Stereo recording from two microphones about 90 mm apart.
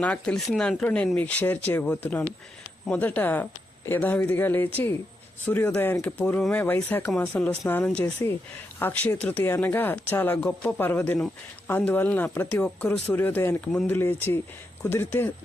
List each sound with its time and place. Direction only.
0.0 s speech: 10° left (ahead or behind)
8.0 s speech: 30° left (ahead or behind)
8.8 s speech: 20° left (ahead or behind)
10.8 s speech: 25° left (ahead or behind)